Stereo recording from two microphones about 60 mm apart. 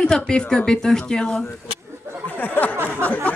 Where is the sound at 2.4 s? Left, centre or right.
Left.